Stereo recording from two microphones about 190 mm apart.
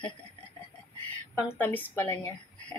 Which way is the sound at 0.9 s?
10° left (ahead or behind).